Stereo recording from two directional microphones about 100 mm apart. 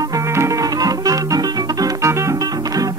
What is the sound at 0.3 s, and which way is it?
Music, 30° right (ahead or behind).